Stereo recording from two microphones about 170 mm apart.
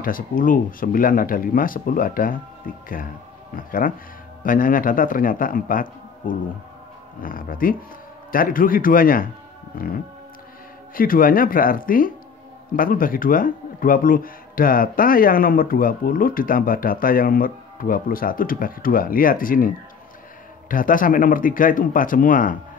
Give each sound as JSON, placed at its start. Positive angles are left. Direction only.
{"t": 0.0, "sound": "speech", "side_deg": 55}
{"t": 11.0, "sound": "speech", "side_deg": 55}